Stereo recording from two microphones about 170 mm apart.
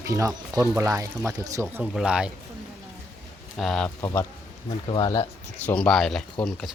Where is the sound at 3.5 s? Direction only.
5° left (ahead or behind).